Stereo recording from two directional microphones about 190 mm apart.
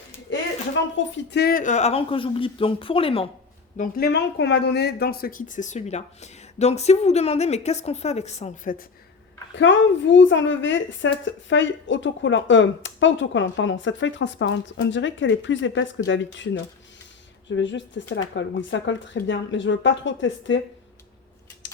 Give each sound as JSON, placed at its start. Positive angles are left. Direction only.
{"t": 0.3, "sound": "a sound", "side_deg": 75}
{"t": 0.9, "sound": "speech", "side_deg": 70}
{"t": 3.8, "sound": "speech", "side_deg": 55}
{"t": 9.6, "sound": "a woman's voice", "side_deg": 75}
{"t": 17.5, "sound": "a woman's voice", "side_deg": 70}